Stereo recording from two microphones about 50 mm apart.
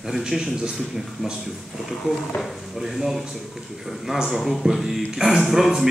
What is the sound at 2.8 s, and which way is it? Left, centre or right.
Speech, centre.